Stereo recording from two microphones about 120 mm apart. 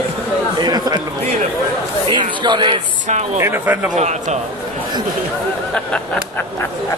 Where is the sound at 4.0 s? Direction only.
75° right (ahead or behind).